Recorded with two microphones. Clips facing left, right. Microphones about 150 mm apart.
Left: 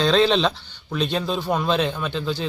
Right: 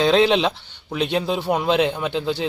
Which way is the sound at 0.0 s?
15° right (ahead or behind).